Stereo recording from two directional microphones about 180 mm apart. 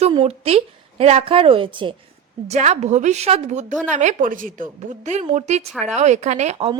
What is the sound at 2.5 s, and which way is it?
A woman's voice, 40° right (ahead or behind).